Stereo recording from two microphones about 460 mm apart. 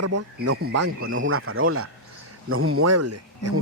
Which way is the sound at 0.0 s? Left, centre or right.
Right.